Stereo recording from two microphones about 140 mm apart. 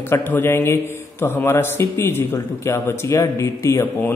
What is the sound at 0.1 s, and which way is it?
A man's voice, 15° left (ahead or behind).